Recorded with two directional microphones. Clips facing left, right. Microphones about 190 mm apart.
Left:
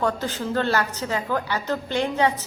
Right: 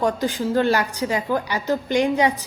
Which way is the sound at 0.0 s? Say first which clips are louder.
Right 3 dB; 15° right (ahead or behind).